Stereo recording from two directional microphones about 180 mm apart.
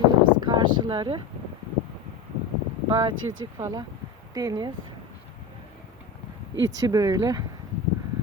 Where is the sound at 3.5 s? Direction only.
20° right (ahead or behind).